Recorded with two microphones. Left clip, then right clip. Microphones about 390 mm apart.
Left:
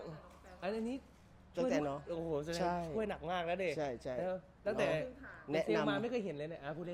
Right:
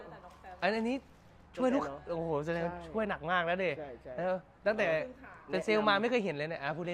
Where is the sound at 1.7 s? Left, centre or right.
Left.